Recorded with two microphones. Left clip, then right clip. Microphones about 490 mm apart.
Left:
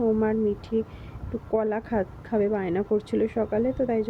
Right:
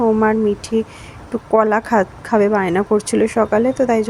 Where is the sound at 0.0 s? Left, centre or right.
Left.